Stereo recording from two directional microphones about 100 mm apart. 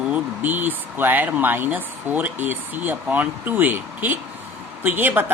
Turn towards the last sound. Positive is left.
turn(degrees=-20)  # may be behind; listen again after turning